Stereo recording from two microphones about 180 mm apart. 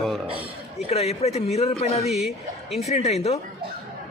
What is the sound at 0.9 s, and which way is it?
A man's voice, 35° left (ahead or behind).